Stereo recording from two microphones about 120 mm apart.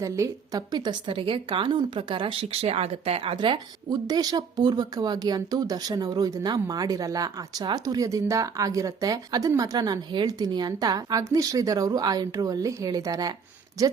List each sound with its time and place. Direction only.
0.0 s a woman's voice: 30° right (ahead or behind)